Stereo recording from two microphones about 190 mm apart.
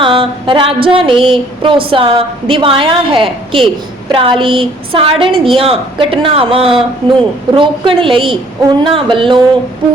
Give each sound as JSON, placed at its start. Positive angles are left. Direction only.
{"t": 0.0, "sound": "a woman's voice", "side_deg": -25}